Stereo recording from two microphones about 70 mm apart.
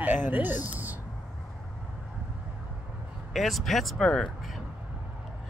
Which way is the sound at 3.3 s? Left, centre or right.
Centre.